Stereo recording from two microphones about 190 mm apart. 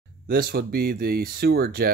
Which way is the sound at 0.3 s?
55° right (ahead or behind).